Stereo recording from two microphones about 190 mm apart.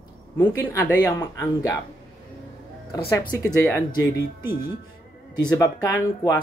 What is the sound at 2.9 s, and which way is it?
Speech, 20° left (ahead or behind).